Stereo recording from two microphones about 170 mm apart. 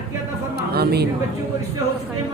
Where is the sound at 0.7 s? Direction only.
70° right (ahead or behind).